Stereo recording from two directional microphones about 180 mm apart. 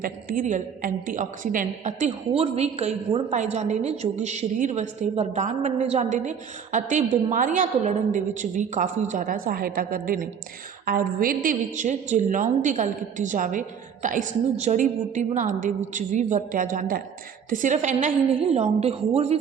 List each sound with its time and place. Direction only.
0.0 s a woman's voice: 50° right (ahead or behind)